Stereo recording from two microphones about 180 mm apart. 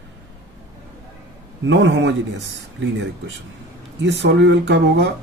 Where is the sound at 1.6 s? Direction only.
85° right.